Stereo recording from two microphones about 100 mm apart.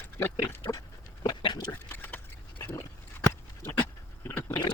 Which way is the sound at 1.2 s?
50° left (ahead or behind).